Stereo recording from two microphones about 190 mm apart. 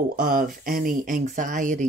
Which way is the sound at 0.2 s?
50° right (ahead or behind).